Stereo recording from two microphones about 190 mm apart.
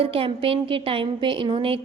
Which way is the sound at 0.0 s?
30° right (ahead or behind).